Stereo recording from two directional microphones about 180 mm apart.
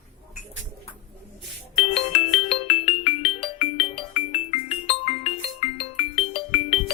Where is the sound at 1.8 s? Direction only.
35° left (ahead or behind).